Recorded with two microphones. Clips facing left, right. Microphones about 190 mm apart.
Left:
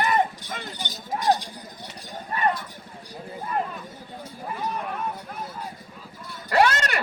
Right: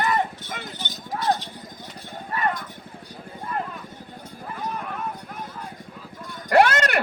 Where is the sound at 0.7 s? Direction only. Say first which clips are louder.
Left 2 dB; 15° left (ahead or behind).